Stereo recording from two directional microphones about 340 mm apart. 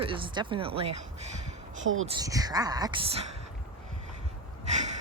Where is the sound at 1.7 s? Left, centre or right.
Right.